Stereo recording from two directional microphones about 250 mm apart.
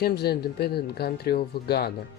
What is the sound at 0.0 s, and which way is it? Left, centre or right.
Speech, left.